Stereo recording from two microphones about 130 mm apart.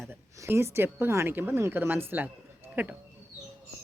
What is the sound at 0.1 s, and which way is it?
Speech, 20° right (ahead or behind).